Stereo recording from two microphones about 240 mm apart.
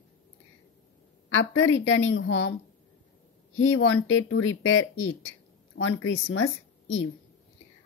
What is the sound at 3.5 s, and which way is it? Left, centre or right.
A woman's voice, left.